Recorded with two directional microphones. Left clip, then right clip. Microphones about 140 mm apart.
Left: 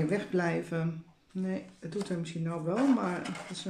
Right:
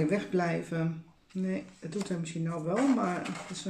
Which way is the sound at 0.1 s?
25° left (ahead or behind).